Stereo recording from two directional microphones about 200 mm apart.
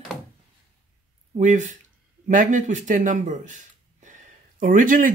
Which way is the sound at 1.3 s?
35° right (ahead or behind).